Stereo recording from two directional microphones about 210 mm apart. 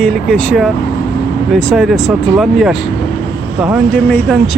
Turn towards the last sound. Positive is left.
turn(degrees=5)  # may be behind; listen again after turning